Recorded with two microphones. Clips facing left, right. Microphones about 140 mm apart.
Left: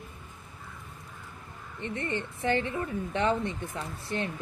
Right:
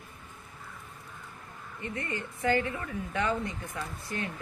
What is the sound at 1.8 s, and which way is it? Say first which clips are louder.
A woman's voice: left 3 dB; 30° left (ahead or behind).